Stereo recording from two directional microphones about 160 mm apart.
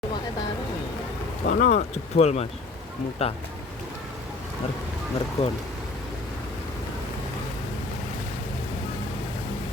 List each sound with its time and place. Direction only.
1.5 s speech: 55° left (ahead or behind); by 3.4 s 40° left (ahead or behind)
5.4 s speech: 40° left (ahead or behind)